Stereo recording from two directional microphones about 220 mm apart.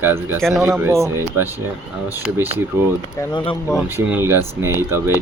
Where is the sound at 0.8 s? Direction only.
10° right (ahead or behind).